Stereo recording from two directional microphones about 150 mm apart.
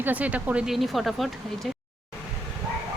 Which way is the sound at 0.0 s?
10° right (ahead or behind).